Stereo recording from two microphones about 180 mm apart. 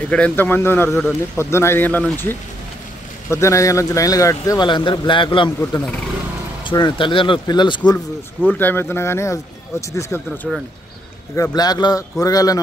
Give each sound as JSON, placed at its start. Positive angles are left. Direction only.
{"t": 0.1, "sound": "a man's voice", "side_deg": 10}
{"t": 5.6, "sound": "a man's voice", "side_deg": 10}
{"t": 6.6, "sound": "a man's voice", "side_deg": 25}
{"t": 8.5, "sound": "a man's voice", "side_deg": 10}